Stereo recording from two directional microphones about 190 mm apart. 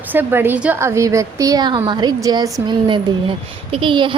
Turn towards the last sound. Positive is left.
turn(degrees=-25)  # may be behind; listen again after turning